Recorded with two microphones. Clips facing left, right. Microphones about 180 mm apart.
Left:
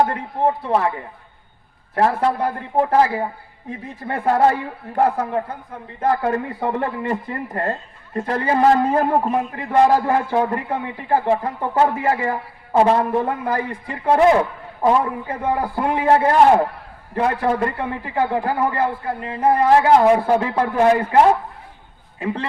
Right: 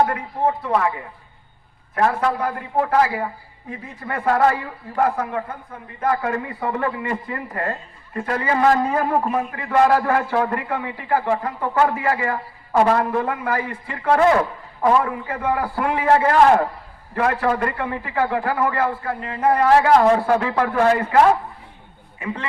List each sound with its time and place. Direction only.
0.1 s a man's voice: 25° left (ahead or behind)
2.0 s a man's voice: 30° left (ahead or behind)